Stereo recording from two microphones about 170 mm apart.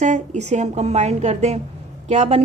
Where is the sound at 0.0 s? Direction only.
45° right (ahead or behind).